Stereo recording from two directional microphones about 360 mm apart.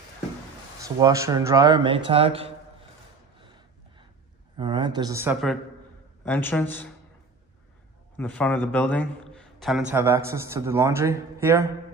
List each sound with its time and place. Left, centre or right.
0.7 s a man's voice: centre
4.6 s a man's voice: centre
8.2 s a man's voice: centre